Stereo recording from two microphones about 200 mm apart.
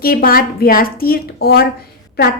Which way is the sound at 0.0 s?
50° left (ahead or behind).